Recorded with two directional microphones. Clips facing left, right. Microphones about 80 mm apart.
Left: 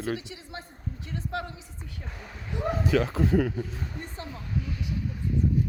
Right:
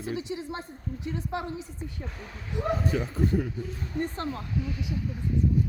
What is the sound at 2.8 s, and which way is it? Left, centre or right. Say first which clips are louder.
Speech: left 3 dB; left.